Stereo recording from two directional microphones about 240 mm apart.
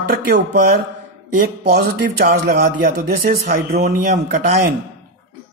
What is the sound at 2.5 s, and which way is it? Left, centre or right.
A man's voice, right.